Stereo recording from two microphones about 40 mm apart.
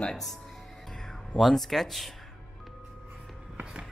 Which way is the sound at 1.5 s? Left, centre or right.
Centre.